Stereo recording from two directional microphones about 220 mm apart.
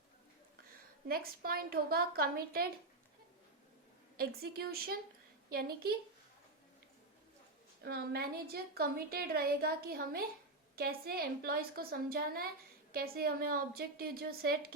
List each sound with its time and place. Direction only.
1.0 s a woman's voice: 45° right (ahead or behind)
4.2 s a woman's voice: 45° right (ahead or behind)
7.8 s a woman's voice: 45° right (ahead or behind)